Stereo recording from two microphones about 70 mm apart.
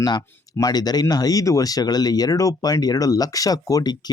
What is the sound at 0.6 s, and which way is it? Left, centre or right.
Speech, left.